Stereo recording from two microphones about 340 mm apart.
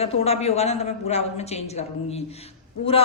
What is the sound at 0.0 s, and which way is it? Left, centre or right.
A woman's voice, centre.